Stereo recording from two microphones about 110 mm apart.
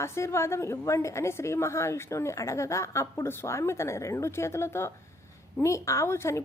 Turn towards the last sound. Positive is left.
turn(degrees=25)  # may be behind; listen again after turning